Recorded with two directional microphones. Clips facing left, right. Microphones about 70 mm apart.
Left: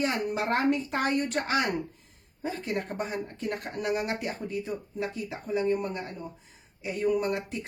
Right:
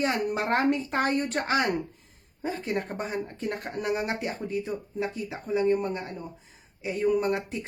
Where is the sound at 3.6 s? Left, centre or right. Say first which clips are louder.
Right 1 dB; right.